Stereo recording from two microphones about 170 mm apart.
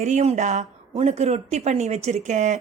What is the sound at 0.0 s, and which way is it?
A woman's voice, 40° right (ahead or behind).